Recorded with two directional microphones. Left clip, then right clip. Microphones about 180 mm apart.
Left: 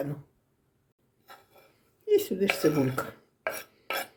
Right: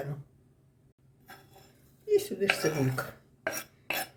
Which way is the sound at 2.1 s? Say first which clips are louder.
Left 2 dB; 40° left (ahead or behind).